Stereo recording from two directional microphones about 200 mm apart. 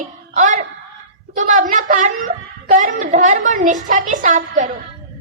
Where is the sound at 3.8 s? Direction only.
40° right (ahead or behind).